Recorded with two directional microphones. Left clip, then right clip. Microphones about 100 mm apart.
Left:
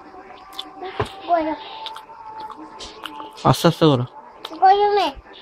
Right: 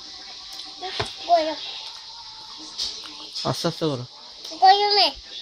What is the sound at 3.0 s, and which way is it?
Music, 35° left (ahead or behind).